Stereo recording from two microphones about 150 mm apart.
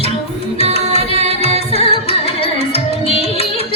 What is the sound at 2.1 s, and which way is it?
Carnatic music, 40° left (ahead or behind).